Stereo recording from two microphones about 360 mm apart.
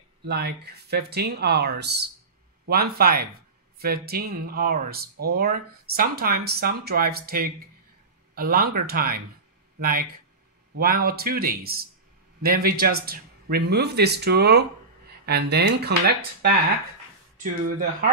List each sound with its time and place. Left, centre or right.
0.3 s speech: right
15.0 s a sound: right
15.5 s speech: right